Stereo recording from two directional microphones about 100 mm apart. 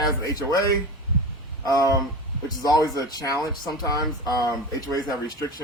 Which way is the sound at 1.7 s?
35° right (ahead or behind).